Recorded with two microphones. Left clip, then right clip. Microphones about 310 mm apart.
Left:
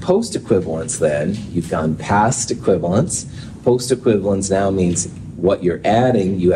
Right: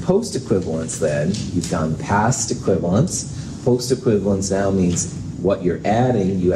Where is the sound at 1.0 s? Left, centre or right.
Left.